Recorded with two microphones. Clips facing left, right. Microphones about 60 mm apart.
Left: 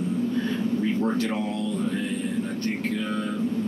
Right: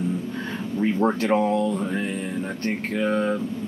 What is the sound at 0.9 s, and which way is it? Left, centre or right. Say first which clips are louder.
Speech: right 4 dB; right.